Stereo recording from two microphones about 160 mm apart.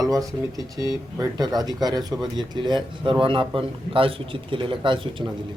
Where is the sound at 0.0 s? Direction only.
20° right (ahead or behind).